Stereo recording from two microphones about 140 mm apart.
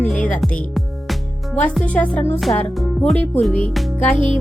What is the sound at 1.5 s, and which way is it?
Speech, 10° left (ahead or behind).